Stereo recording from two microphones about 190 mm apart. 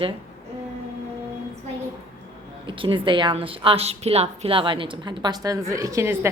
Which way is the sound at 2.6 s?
25° right (ahead or behind).